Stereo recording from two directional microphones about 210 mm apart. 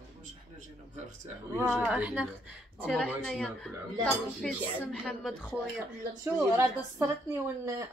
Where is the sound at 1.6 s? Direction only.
10° right (ahead or behind).